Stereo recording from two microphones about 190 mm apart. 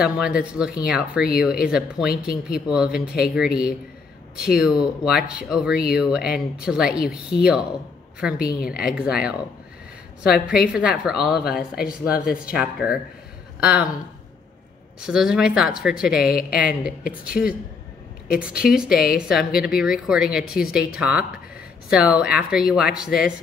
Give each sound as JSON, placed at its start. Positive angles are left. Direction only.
{"t": 0.0, "sound": "speech", "side_deg": -5}
{"t": 12.1, "sound": "speech", "side_deg": 50}
{"t": 12.5, "sound": "speech", "side_deg": -5}
{"t": 15.0, "sound": "speech", "side_deg": -5}
{"t": 18.3, "sound": "speech", "side_deg": -5}